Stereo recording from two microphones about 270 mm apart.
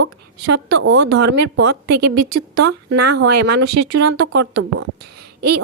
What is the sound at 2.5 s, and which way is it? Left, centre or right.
A woman's voice, right.